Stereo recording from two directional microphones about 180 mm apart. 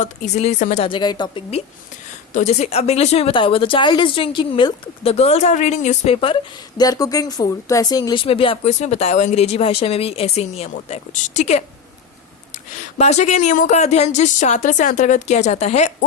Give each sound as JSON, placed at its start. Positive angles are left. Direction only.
{"t": 0.0, "sound": "a woman's voice", "side_deg": 40}
{"t": 0.9, "sound": "a woman's voice", "side_deg": 25}
{"t": 6.7, "sound": "a woman's voice", "side_deg": 20}
{"t": 13.0, "sound": "a woman's voice", "side_deg": 40}